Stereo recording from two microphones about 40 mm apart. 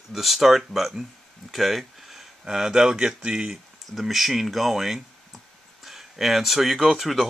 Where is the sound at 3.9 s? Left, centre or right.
Centre.